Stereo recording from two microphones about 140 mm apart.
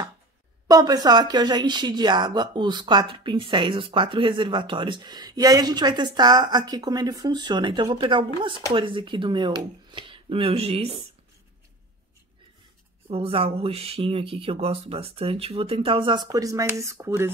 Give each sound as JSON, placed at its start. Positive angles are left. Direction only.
{"t": 0.7, "sound": "speech", "side_deg": -25}
{"t": 13.1, "sound": "speech", "side_deg": -45}